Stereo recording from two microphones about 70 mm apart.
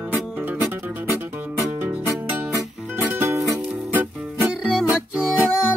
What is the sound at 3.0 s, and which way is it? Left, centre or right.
Music, right.